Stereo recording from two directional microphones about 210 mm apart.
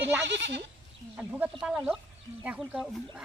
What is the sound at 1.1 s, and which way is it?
Speech, 5° right (ahead or behind).